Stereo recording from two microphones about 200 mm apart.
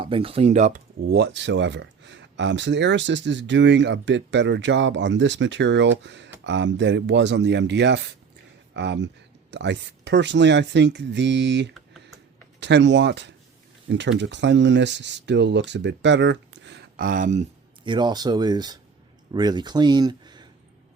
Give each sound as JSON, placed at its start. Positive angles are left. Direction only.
{"t": 0.0, "sound": "speech", "side_deg": -25}
{"t": 1.0, "sound": "speech", "side_deg": -55}
{"t": 17.1, "sound": "speech", "side_deg": -40}
{"t": 17.8, "sound": "speech", "side_deg": -20}